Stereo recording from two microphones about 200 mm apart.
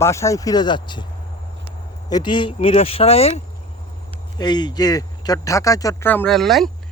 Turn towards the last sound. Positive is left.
turn(degrees=0)  # may be behind; listen again after turning